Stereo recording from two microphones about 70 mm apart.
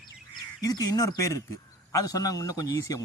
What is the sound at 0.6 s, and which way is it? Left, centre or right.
A man's voice, left.